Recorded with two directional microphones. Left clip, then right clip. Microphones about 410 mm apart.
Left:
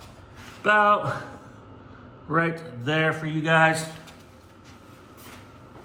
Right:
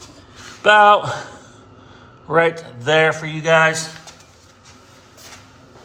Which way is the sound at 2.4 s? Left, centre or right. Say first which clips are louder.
Right 10 dB; centre.